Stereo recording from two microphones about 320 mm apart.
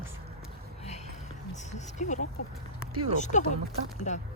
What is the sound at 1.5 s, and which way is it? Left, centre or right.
Speech, left.